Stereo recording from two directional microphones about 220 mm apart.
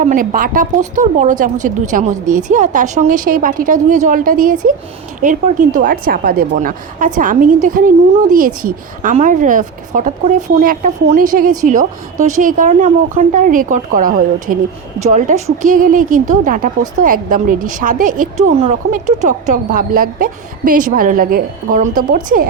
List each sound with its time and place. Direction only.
0.0 s a woman's voice: 35° right (ahead or behind)